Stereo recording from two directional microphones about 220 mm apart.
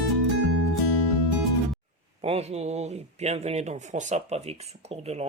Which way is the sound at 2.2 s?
30° right (ahead or behind).